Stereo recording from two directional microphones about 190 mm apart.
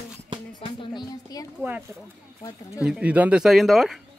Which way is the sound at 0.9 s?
20° left (ahead or behind).